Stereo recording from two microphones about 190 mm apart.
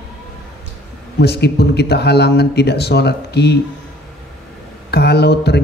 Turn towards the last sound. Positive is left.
turn(degrees=60)  # may be behind; listen again after turning